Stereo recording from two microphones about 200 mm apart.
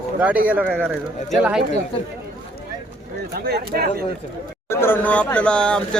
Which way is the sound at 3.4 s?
50° right (ahead or behind).